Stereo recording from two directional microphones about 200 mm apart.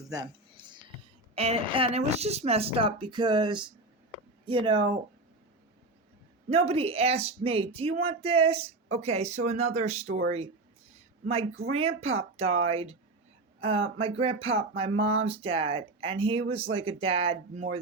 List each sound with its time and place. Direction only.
0.1 s a sound: 20° right (ahead or behind)
1.4 s speech: 30° right (ahead or behind)
6.5 s speech: 30° right (ahead or behind)